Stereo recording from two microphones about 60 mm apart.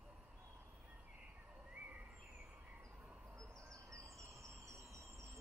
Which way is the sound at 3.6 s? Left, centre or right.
Right.